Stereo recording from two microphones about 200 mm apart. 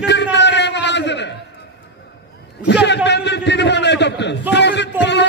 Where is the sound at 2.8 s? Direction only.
60° left (ahead or behind).